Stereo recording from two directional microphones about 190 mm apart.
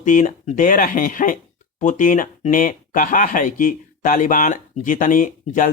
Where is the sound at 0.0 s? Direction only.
40° left (ahead or behind).